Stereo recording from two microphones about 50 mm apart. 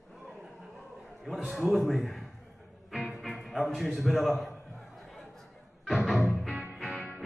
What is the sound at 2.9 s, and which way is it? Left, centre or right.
Music, centre.